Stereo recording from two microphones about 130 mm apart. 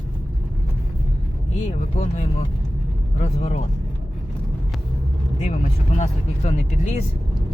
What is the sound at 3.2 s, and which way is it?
Speech, 60° left (ahead or behind).